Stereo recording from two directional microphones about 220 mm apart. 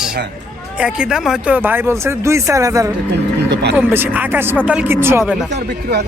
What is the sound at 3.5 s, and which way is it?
Speech, 50° right (ahead or behind).